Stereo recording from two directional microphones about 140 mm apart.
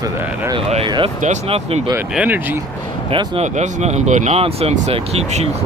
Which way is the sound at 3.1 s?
40° right (ahead or behind).